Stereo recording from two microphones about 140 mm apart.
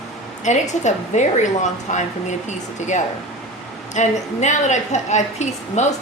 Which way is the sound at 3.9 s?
60° left (ahead or behind).